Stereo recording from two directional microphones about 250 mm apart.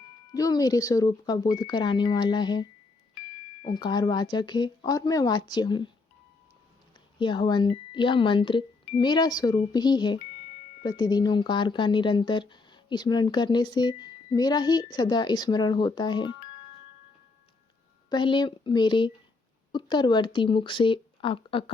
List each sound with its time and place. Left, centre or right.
0.3 s speech: centre
7.2 s speech: centre
18.1 s speech: centre